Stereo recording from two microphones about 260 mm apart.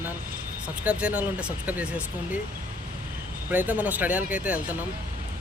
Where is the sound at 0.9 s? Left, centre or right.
Centre.